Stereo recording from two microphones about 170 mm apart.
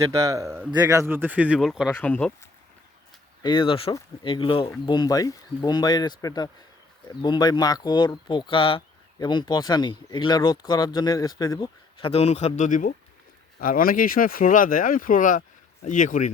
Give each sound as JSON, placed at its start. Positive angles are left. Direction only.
{"t": 0.0, "sound": "a man's voice", "side_deg": -20}
{"t": 2.0, "sound": "speech", "side_deg": 10}
{"t": 3.4, "sound": "speech", "side_deg": 30}